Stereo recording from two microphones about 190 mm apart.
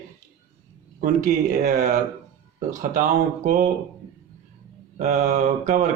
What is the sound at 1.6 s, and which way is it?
Speech, 45° right (ahead or behind).